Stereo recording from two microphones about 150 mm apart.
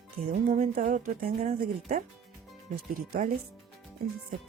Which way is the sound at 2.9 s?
70° right (ahead or behind).